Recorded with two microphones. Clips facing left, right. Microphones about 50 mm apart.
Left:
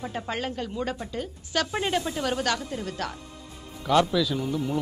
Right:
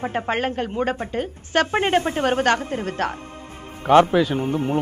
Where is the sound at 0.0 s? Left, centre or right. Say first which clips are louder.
Right 8 dB; right.